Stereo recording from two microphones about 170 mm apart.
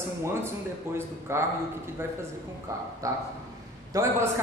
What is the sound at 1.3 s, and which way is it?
Speech, 15° right (ahead or behind).